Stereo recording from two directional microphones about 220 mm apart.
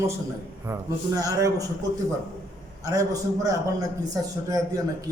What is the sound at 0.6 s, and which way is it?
A man's voice, 15° right (ahead or behind).